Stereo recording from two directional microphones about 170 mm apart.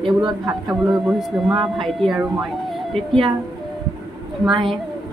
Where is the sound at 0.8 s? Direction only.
Centre (ahead or behind).